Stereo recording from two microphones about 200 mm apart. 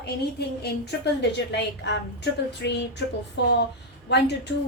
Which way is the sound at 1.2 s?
60° left (ahead or behind).